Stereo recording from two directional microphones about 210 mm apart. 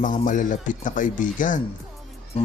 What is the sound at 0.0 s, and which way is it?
Speech, 40° left (ahead or behind).